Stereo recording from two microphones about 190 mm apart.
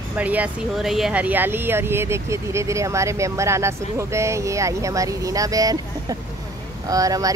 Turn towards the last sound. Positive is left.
turn(degrees=-20)  # may be behind; listen again after turning